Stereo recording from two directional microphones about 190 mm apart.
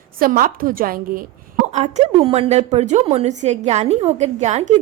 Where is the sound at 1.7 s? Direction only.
35° right (ahead or behind).